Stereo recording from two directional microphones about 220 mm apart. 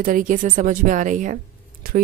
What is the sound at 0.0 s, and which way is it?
Speech, 40° right (ahead or behind).